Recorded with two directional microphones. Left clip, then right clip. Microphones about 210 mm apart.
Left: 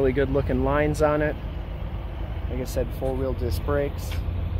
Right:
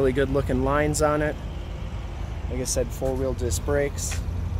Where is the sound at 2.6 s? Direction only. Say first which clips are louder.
Right 2 dB; 10° right (ahead or behind).